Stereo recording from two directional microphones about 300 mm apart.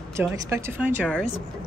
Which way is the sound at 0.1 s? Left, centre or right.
Centre.